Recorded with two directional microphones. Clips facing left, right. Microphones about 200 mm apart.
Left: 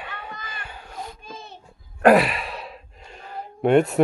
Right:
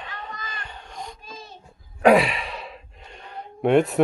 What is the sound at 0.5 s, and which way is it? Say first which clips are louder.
Wail: left 1 dB; 5° left (ahead or behind).